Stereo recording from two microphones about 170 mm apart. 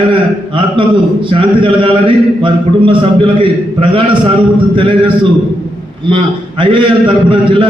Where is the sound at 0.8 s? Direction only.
30° right (ahead or behind).